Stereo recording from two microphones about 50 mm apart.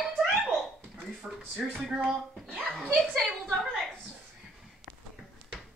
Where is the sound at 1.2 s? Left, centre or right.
Centre.